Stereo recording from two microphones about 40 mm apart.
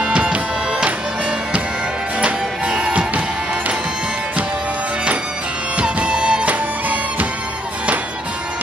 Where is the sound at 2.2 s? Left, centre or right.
Right.